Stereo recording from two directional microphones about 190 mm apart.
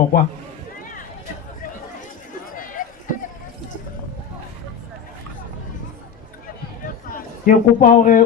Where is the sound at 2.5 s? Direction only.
45° left (ahead or behind).